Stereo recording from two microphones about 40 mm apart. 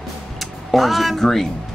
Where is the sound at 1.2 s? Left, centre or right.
Centre.